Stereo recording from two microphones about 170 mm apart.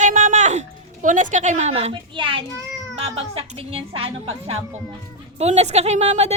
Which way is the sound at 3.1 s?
35° right (ahead or behind).